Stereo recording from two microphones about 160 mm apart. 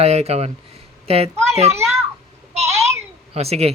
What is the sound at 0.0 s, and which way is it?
A child's voice, 40° right (ahead or behind).